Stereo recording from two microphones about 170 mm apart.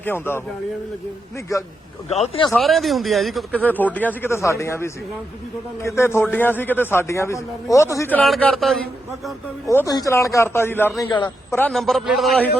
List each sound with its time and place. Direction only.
0.0 s speech: 15° left (ahead or behind)
2.0 s speech: 40° left (ahead or behind)
2.5 s speech: centre (ahead or behind)
8.2 s a man's voice: 5° left (ahead or behind)
9.6 s a man's voice: 20° left (ahead or behind); by 12.5 s centre (ahead or behind)